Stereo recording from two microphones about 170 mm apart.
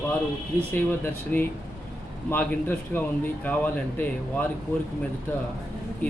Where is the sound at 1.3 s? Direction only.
10° left (ahead or behind).